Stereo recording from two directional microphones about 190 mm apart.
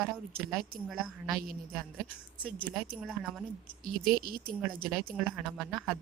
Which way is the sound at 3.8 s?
50° right (ahead or behind).